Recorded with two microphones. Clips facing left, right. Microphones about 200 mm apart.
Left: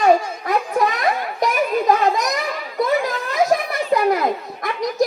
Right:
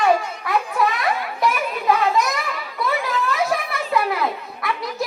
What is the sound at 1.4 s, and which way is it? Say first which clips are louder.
Children playing: left 5 dB; 40° left (ahead or behind).